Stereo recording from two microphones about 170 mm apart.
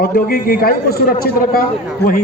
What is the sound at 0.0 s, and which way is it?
A man's voice, 60° left (ahead or behind).